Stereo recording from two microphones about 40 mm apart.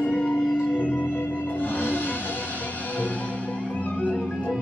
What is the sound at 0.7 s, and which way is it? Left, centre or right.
Music, left.